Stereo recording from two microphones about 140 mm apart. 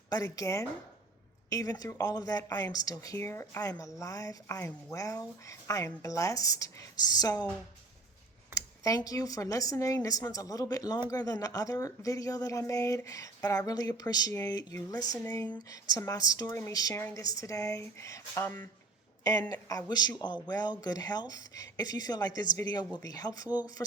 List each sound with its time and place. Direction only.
0.1 s speech: 25° left (ahead or behind)
8.5 s speech: 25° left (ahead or behind)